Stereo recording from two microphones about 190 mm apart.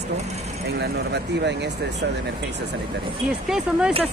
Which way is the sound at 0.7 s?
60° right (ahead or behind).